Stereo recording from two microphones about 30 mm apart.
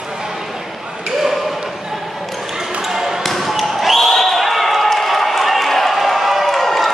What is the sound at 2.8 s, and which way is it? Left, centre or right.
Basketball bounce, centre.